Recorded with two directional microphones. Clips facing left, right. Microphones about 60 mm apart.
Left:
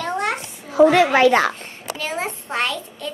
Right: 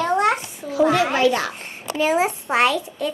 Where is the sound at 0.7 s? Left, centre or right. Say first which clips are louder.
Left 4 dB; left.